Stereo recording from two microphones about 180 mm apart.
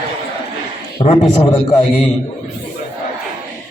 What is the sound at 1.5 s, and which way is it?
Speech, 25° left (ahead or behind).